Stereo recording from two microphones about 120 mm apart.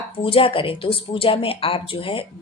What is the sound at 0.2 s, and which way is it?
Speech, 50° left (ahead or behind).